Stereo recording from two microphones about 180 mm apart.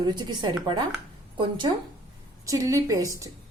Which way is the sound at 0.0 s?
25° right (ahead or behind).